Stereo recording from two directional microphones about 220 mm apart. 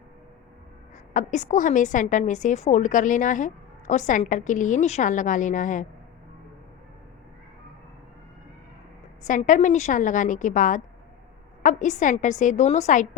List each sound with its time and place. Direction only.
1.1 s a woman's voice: 35° left (ahead or behind)
9.2 s a woman's voice: 35° left (ahead or behind)